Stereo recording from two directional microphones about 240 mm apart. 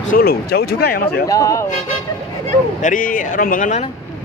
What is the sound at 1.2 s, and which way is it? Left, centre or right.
Speech, centre.